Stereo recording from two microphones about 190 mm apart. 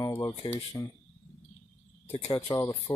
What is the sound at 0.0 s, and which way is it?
Speech, 20° left (ahead or behind).